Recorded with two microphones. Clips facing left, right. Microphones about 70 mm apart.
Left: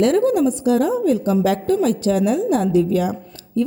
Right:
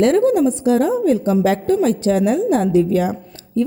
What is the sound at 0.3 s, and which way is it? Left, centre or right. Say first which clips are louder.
A woman's voice: right 2 dB; right.